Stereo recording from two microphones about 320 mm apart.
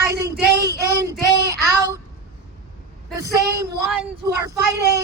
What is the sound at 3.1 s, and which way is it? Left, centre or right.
Speech, centre.